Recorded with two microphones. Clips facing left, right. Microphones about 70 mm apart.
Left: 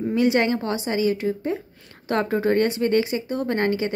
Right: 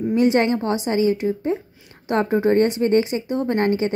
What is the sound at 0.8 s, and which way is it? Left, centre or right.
A woman's voice, right.